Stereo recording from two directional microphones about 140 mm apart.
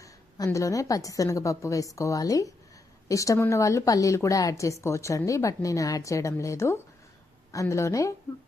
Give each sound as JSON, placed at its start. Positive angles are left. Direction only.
{"t": 0.0, "sound": "a woman's voice", "side_deg": 25}